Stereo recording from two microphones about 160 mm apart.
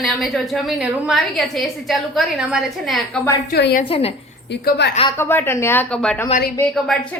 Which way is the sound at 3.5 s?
90° left.